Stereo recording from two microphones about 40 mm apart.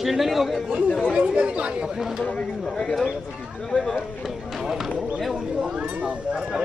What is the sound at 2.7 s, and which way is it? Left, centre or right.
Speech, centre.